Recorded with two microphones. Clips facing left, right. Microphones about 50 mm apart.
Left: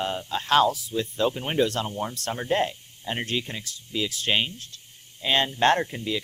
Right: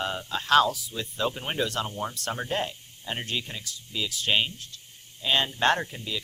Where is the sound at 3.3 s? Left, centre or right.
Left.